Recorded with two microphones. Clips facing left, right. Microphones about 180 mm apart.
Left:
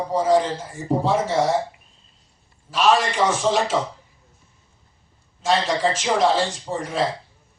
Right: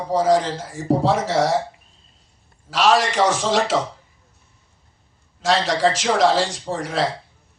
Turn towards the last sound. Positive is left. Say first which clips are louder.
# right 1 dB
turn(degrees=-90)